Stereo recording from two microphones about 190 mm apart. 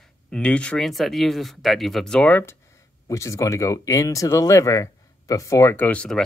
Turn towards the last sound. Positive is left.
turn(degrees=5)  # may be behind; listen again after turning